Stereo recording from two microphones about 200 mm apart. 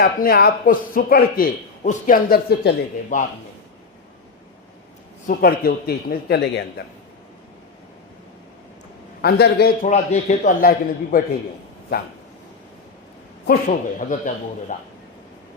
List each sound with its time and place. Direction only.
0.0 s a man's voice: 50° left (ahead or behind)
5.2 s a man's voice: 45° left (ahead or behind)
9.2 s a man's voice: 55° left (ahead or behind)
9.8 s a man's voice: 35° left (ahead or behind)
13.7 s a man's voice: 40° left (ahead or behind)